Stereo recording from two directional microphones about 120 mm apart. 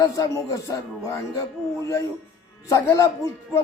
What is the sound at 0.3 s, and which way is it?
Speech, 25° left (ahead or behind).